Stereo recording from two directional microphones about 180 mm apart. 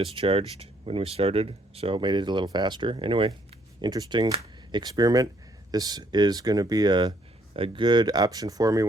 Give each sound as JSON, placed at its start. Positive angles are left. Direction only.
{"t": 0.0, "sound": "speech", "side_deg": -30}